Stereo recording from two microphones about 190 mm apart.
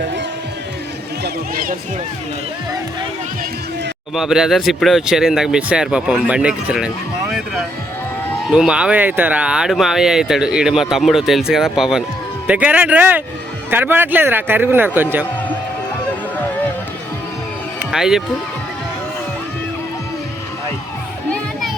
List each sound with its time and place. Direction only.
1.2 s speech: 50° right (ahead or behind)
4.1 s speech: centre (ahead or behind)
17.9 s speech: 5° right (ahead or behind)
21.2 s music: 5° left (ahead or behind)